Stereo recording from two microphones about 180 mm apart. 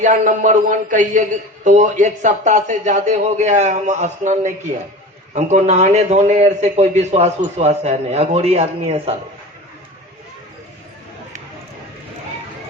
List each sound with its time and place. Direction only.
0.0 s a man's voice: 45° right (ahead or behind)